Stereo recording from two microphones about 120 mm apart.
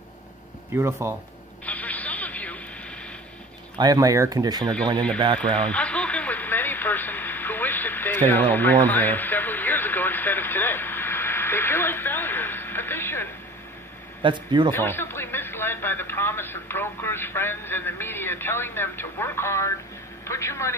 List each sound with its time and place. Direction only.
0.7 s speech: 20° right (ahead or behind)
1.7 s radio: 15° left (ahead or behind)
3.7 s speech: 35° right (ahead or behind)
5.7 s radio: 10° left (ahead or behind)
14.2 s speech: 40° right (ahead or behind)
14.7 s a man's voice: 20° left (ahead or behind)